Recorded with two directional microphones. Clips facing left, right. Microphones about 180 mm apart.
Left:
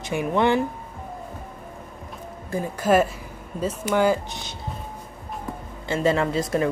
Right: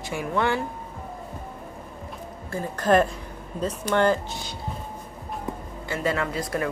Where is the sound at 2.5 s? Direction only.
10° left (ahead or behind).